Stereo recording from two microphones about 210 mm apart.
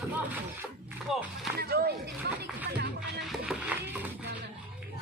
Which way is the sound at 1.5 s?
45° right (ahead or behind).